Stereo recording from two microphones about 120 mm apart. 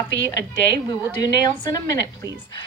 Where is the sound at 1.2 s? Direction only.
30° left (ahead or behind).